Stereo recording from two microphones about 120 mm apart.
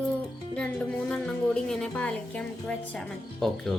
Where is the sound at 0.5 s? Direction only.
10° left (ahead or behind).